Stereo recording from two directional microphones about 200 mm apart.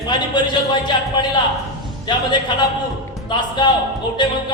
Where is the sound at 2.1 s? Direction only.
20° left (ahead or behind).